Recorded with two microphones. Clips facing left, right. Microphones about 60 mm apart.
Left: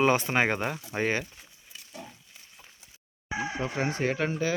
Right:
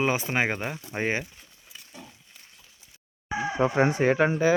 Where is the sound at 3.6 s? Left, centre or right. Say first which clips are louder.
Right 9 dB; right.